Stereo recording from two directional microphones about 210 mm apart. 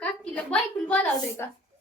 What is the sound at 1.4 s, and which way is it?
Speech, 10° left (ahead or behind).